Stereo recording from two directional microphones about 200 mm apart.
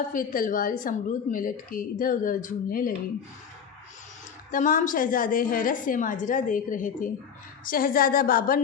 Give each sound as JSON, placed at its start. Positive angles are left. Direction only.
{"t": 0.1, "sound": "a woman's voice", "side_deg": 45}
{"t": 4.5, "sound": "a woman's voice", "side_deg": 40}